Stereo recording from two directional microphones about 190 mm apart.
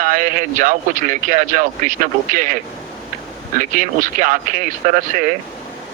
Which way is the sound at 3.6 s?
45° right (ahead or behind).